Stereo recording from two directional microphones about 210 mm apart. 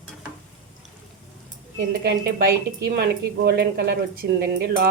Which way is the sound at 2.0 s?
50° right (ahead or behind).